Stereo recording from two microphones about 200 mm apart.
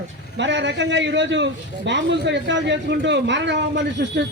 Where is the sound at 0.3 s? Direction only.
60° right (ahead or behind).